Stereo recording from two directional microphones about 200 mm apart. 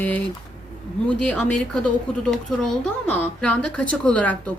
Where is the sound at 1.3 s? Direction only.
5° left (ahead or behind).